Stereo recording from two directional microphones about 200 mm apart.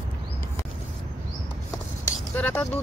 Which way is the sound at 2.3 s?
10° left (ahead or behind).